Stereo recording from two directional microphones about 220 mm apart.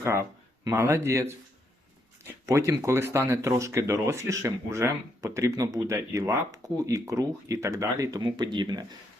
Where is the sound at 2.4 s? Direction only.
15° right (ahead or behind).